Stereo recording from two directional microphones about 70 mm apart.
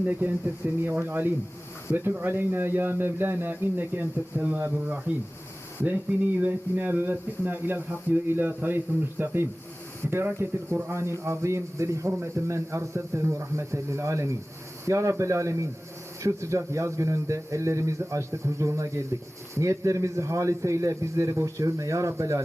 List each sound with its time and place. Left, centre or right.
0.0 s speech: right